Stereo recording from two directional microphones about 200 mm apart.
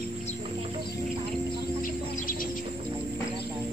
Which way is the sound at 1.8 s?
45° left (ahead or behind).